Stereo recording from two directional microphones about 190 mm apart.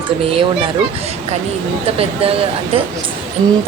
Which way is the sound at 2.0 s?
30° right (ahead or behind).